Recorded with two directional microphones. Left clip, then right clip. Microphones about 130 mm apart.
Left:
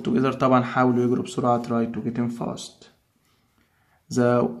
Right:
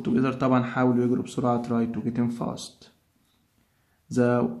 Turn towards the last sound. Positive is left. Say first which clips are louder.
# left 3 dB
turn(degrees=25)  # may be behind; listen again after turning